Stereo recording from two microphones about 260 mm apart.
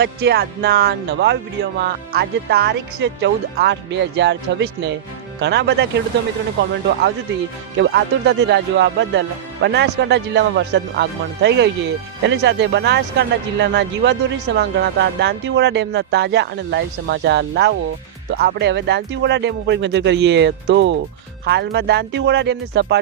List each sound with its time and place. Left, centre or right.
0.0 s a man's voice: right
7.8 s a man's voice: right